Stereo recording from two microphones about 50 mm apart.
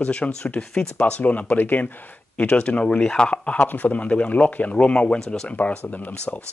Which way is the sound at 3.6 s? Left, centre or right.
Left.